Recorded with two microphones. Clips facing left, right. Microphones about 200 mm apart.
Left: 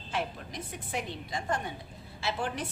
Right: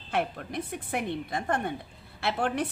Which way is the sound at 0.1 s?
60° right (ahead or behind).